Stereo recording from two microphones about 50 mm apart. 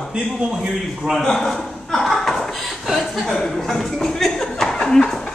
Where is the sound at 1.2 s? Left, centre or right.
Centre.